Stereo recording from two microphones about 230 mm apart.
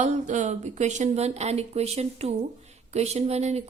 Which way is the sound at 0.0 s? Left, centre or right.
Right.